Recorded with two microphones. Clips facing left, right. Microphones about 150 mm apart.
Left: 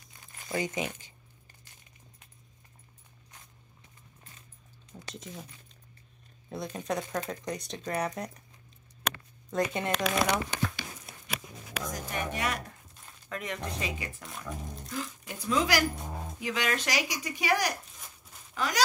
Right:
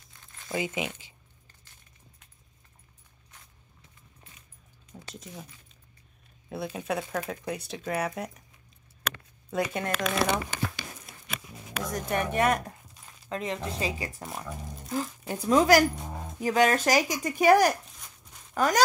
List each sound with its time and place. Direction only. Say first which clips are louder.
0.5 s speech: right 1 dB; 10° right (ahead or behind)
5.1 s speech: even; centre (ahead or behind)
6.5 s speech: right 2 dB; 5° right (ahead or behind)
9.5 s speech: even; 5° right (ahead or behind)
12.1 s speech: right 8 dB; 55° right (ahead or behind)
13.3 s speech: right 4 dB; 30° right (ahead or behind)
14.5 s a sound: even; centre (ahead or behind)
14.9 s speech: right 8 dB; 40° right (ahead or behind)
16.0 s keys jangling: right 1 dB; centre (ahead or behind)
16.3 s speech: right 9 dB; 45° right (ahead or behind)